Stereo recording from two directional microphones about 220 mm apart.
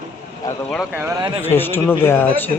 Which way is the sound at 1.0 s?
15° right (ahead or behind).